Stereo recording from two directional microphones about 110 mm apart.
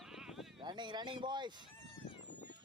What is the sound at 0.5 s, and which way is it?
Speech, 45° right (ahead or behind).